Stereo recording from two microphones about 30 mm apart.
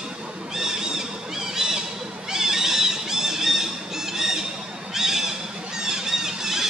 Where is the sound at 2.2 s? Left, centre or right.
Centre.